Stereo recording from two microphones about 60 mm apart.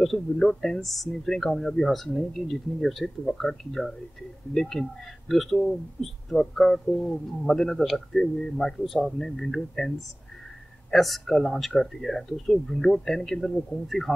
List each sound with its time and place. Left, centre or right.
0.0 s speech: centre